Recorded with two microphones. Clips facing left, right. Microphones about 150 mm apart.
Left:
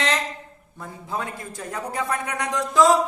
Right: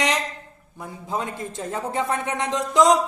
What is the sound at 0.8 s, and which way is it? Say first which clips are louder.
A man's voice: right 2 dB; 20° right (ahead or behind).